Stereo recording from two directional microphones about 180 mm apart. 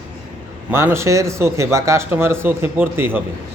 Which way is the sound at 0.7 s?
15° right (ahead or behind).